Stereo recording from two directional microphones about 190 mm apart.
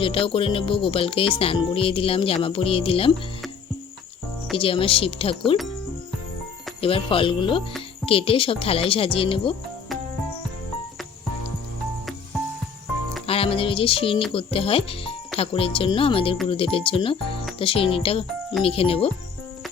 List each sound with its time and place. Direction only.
0.0 s speech: 30° left (ahead or behind)
4.5 s speech: 30° left (ahead or behind)
6.8 s speech: 30° left (ahead or behind)
13.2 s music: 30° left (ahead or behind)
14.3 s speech: 30° left (ahead or behind)